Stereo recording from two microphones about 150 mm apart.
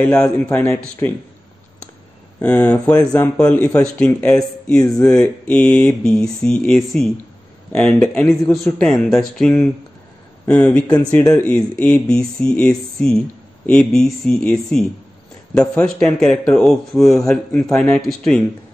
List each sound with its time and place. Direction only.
0.0 s speech: 10° left (ahead or behind)
2.4 s speech: 10° left (ahead or behind)